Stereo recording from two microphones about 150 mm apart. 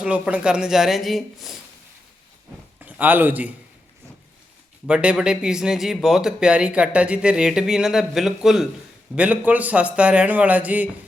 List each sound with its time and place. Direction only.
0.0 s speech: 10° right (ahead or behind)
2.8 s a man's voice: 10° right (ahead or behind)
4.9 s a man's voice: 5° right (ahead or behind)